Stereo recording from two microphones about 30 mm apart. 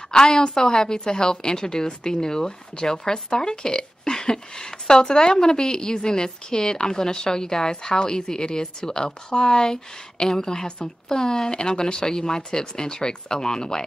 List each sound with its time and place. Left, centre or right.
0.1 s a woman's voice: left